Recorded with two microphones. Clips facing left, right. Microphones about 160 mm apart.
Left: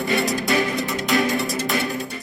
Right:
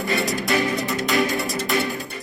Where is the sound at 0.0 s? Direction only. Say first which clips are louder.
Left 2 dB; centre (ahead or behind).